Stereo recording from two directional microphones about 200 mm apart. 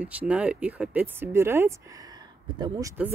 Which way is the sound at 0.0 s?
5° right (ahead or behind).